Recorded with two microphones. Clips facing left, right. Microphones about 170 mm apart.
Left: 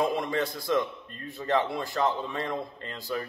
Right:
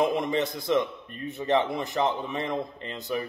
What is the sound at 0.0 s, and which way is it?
A man's voice, 20° right (ahead or behind).